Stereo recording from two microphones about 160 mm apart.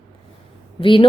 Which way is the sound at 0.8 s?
30° left (ahead or behind).